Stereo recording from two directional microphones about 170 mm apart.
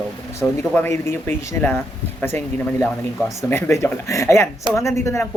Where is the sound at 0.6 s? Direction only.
10° left (ahead or behind).